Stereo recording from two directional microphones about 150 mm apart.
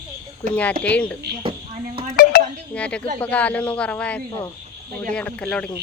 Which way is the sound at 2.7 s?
10° left (ahead or behind).